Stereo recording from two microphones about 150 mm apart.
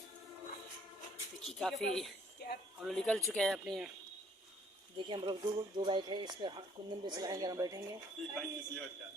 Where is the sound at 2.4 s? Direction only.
90° left.